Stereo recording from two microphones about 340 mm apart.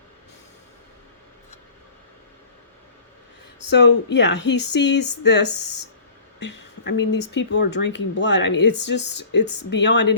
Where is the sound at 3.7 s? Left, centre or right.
Left.